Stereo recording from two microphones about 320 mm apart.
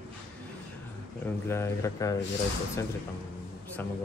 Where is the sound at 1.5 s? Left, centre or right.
Centre.